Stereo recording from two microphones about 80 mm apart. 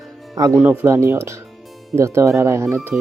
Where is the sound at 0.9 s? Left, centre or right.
Right.